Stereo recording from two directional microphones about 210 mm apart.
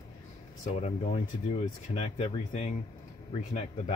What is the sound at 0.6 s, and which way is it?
Speech, 30° left (ahead or behind).